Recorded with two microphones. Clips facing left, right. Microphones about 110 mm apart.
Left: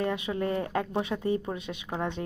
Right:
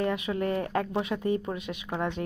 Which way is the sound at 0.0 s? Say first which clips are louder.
Right 1 dB; 25° left (ahead or behind).